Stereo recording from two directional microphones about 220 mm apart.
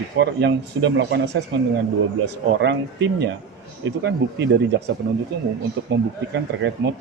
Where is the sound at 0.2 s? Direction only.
50° right (ahead or behind).